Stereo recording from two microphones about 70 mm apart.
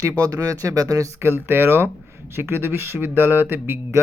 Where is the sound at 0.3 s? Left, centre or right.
Right.